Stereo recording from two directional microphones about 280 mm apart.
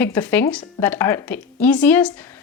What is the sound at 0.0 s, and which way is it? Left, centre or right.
A woman's voice, centre.